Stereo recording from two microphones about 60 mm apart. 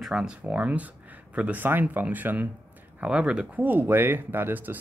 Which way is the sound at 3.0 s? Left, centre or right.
Centre.